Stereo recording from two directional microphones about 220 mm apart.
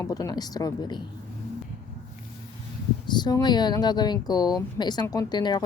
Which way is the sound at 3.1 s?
20° left (ahead or behind).